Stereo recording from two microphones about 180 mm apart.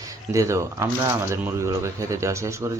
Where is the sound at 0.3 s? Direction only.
15° right (ahead or behind).